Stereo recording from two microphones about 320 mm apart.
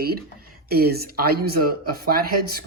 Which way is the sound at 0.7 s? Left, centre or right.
Right.